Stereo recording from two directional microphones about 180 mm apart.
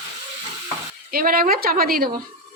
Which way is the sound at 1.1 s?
50° right (ahead or behind).